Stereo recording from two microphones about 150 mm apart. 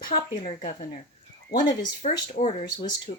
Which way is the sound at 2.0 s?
50° left (ahead or behind).